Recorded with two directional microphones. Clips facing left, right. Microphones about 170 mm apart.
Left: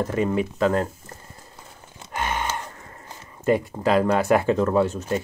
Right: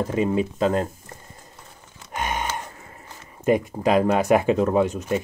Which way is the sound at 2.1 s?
15° right (ahead or behind).